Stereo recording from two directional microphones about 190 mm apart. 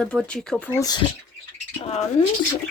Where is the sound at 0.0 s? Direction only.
5° left (ahead or behind).